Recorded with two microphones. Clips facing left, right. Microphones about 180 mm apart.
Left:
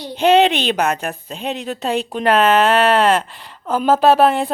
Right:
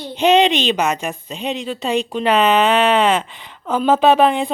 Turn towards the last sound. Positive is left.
turn(degrees=5)  # may be behind; listen again after turning